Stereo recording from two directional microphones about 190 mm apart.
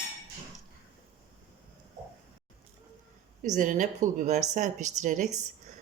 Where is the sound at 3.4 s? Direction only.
45° right (ahead or behind).